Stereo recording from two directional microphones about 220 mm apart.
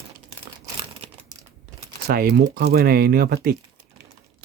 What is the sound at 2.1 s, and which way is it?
Speech, 45° right (ahead or behind).